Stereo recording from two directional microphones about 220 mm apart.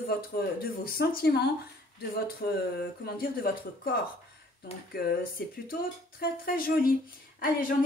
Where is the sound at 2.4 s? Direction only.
40° left (ahead or behind).